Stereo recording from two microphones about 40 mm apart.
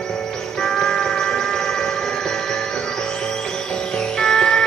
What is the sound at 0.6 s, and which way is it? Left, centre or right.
Music, centre.